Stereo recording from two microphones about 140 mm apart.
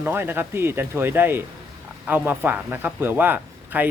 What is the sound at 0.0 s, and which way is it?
A man's voice, 15° right (ahead or behind).